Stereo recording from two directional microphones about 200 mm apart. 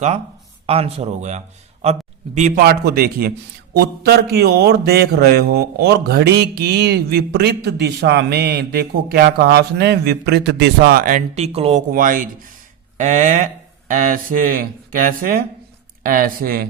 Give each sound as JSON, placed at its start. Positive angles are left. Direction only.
{"t": 0.7, "sound": "a man's voice", "side_deg": -30}
{"t": 2.6, "sound": "a man's voice", "side_deg": -50}
{"t": 11.9, "sound": "a man's voice", "side_deg": -40}